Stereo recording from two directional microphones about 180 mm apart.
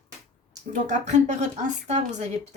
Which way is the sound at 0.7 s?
40° right (ahead or behind).